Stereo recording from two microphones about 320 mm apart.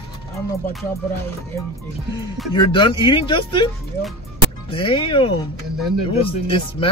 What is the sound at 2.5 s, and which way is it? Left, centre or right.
Speech, centre.